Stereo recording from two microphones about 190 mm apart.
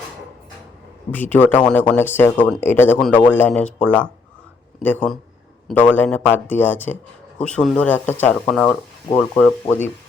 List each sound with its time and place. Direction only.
1.1 s speech: 10° left (ahead or behind)